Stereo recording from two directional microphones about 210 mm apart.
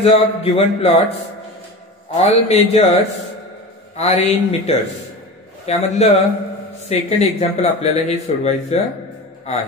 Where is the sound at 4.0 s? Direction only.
30° left (ahead or behind).